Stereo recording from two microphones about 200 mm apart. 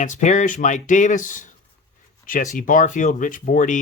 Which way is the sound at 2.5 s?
40° left (ahead or behind).